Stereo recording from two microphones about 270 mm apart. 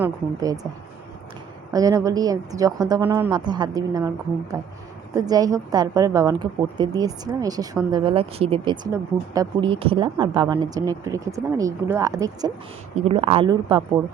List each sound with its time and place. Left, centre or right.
0.0 s speech: centre
1.7 s a woman's voice: centre